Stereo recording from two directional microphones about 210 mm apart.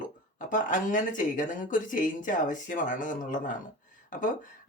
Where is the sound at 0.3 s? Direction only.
40° left (ahead or behind).